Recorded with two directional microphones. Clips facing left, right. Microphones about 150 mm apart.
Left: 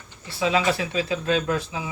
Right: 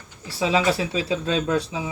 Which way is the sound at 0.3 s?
30° right (ahead or behind).